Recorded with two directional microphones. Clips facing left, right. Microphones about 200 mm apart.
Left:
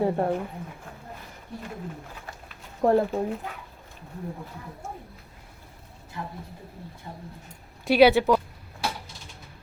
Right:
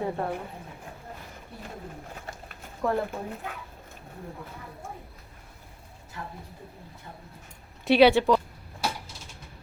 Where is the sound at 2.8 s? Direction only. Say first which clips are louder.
Left 7 dB; 45° left (ahead or behind).